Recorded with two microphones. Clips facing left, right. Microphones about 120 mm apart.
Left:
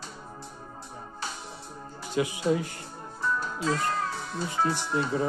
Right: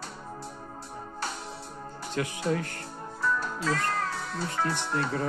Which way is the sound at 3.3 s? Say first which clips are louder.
Left 1 dB; 60° right (ahead or behind).